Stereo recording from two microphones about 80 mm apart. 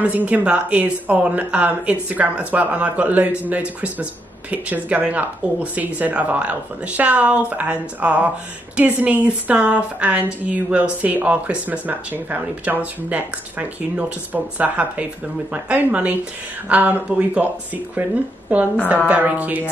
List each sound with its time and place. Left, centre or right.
0.0 s a woman's voice: centre